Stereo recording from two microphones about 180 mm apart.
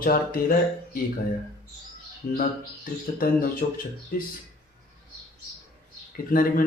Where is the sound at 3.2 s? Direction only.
50° left (ahead or behind).